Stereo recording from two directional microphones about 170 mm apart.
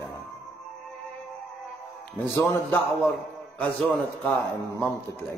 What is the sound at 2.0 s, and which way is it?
A man's voice, 15° left (ahead or behind).